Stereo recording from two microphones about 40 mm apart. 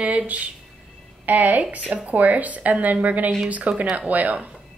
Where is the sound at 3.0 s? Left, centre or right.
Right.